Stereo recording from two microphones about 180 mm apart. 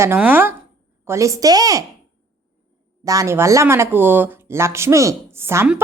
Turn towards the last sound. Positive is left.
turn(degrees=-15)  # may be behind; listen again after turning